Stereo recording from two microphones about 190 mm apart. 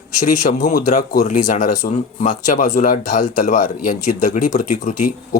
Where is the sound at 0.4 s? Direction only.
50° left (ahead or behind).